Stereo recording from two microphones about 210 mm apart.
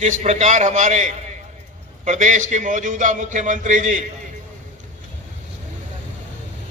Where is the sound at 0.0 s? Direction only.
35° right (ahead or behind).